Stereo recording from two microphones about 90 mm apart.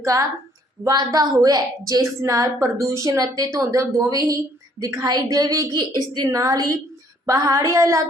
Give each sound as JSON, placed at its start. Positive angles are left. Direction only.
{"t": 0.0, "sound": "a woman's voice", "side_deg": -35}
{"t": 0.9, "sound": "a woman's voice", "side_deg": -50}